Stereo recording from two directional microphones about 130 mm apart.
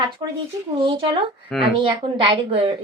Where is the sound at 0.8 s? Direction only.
40° right (ahead or behind).